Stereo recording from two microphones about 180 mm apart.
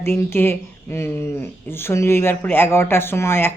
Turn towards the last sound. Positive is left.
turn(degrees=15)  # may be behind; listen again after turning